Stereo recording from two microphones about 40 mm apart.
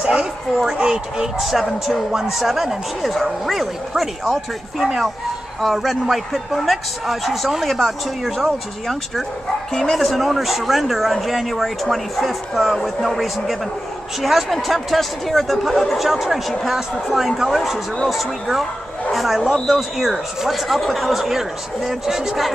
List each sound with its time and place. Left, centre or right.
0.0 s a sound: right
0.7 s speech: centre
1.4 s speech: centre